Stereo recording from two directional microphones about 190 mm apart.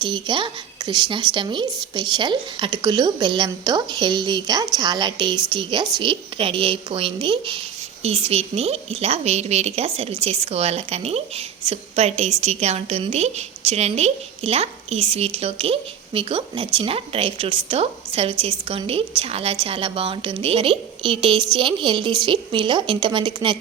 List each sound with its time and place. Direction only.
0.0 s a woman's voice: 25° right (ahead or behind)